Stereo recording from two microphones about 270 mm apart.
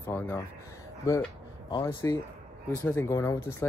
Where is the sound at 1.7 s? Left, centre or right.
Centre.